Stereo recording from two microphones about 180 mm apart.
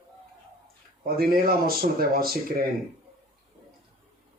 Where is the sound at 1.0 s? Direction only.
55° right (ahead or behind).